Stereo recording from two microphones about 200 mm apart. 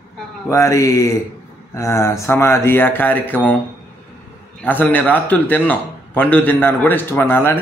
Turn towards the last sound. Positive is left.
turn(degrees=10)  # may be behind; listen again after turning